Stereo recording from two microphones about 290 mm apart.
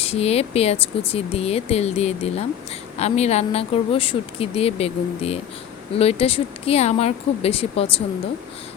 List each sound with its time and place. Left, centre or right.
0.0 s speech: left